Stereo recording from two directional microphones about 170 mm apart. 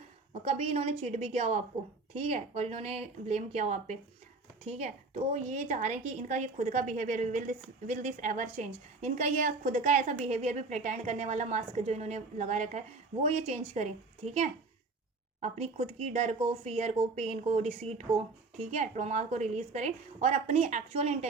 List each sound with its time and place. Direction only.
0.4 s a woman's voice: 40° right (ahead or behind)